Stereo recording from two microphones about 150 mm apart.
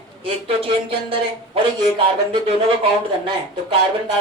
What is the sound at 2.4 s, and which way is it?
Speech, 40° right (ahead or behind).